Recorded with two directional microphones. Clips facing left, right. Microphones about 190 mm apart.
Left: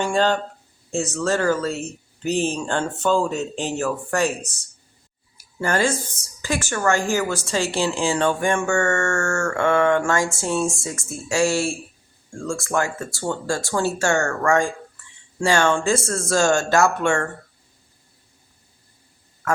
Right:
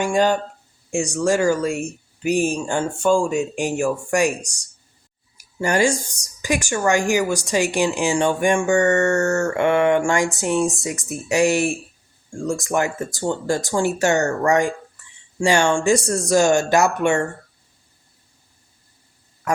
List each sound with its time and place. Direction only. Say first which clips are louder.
0.0 s a woman's voice: right 2 dB; 10° right (ahead or behind)